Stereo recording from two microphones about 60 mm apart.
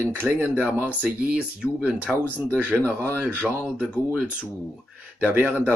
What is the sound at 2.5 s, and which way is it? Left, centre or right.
Speech, right.